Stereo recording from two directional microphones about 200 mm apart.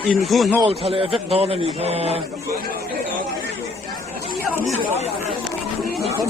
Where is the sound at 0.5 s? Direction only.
25° right (ahead or behind).